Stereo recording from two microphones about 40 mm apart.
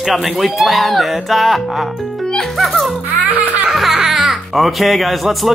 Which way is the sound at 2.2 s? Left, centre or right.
Centre.